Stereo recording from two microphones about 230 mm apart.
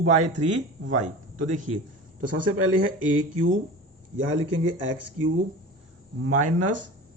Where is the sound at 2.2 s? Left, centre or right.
Right.